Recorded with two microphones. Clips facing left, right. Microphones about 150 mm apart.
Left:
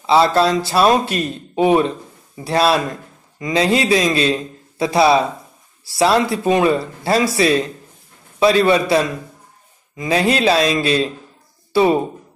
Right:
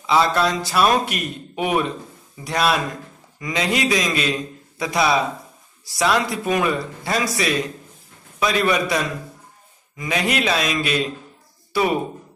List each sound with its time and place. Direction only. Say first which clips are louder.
0.0 s a man's voice: left 5 dB; 30° left (ahead or behind)